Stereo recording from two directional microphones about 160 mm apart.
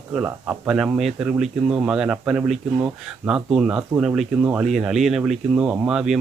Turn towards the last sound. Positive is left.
turn(degrees=-5)  # may be behind; listen again after turning